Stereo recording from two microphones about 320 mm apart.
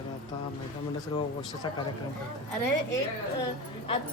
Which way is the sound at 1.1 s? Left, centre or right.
Centre.